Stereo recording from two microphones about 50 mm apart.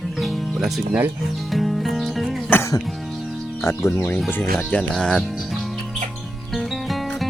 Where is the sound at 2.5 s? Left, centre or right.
Left.